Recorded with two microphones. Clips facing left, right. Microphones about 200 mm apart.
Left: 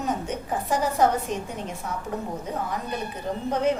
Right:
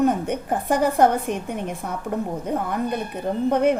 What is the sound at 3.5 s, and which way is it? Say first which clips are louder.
Speech: right 4 dB; 55° right (ahead or behind).